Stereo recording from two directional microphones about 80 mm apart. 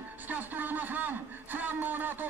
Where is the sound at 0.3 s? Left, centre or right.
Right.